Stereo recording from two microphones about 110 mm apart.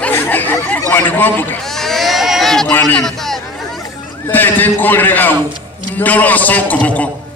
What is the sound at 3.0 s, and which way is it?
Speech, 5° left (ahead or behind).